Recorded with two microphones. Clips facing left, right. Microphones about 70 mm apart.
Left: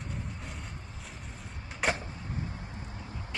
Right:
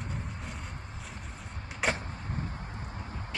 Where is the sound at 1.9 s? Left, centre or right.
Right.